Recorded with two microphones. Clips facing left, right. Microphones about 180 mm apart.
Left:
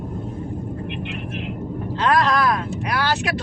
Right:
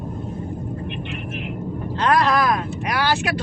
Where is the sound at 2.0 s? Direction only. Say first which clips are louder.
Even; centre (ahead or behind).